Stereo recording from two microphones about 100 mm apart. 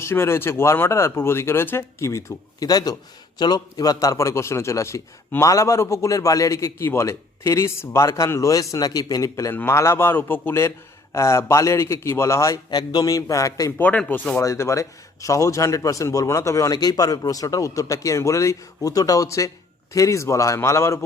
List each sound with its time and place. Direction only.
0.0 s a man's voice: 25° left (ahead or behind)
12.7 s speech: 40° left (ahead or behind)
13.7 s speech: 15° left (ahead or behind)
14.4 s speech: 30° left (ahead or behind)